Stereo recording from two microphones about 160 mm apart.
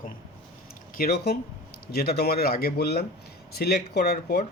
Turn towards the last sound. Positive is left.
turn(degrees=70)  # may be behind; listen again after turning